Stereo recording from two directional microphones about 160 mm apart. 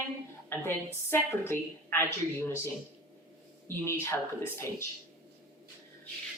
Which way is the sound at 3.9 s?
15° left (ahead or behind).